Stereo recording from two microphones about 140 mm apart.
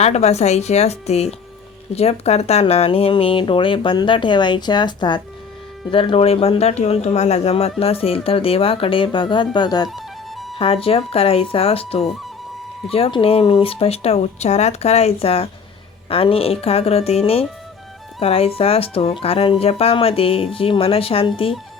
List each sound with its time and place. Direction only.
0.0 s speech: 50° left (ahead or behind); by 9.9 s 30° left (ahead or behind)
9.9 s music: centre (ahead or behind)
10.6 s speech: 40° left (ahead or behind)